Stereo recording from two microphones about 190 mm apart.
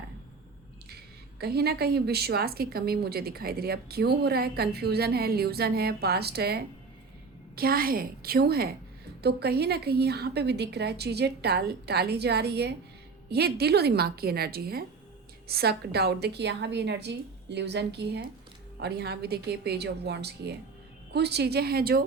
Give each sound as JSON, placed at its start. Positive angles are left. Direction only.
{"t": 1.4, "sound": "a woman's voice", "side_deg": -55}